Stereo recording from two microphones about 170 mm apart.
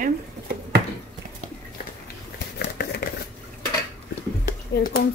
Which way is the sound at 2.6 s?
70° left (ahead or behind).